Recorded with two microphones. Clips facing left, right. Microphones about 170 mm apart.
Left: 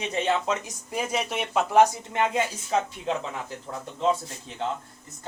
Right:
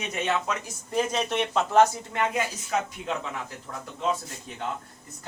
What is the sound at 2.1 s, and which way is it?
Speech, 25° left (ahead or behind).